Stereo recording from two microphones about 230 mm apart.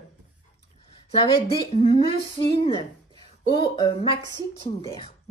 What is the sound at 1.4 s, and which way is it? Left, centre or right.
Speech, left.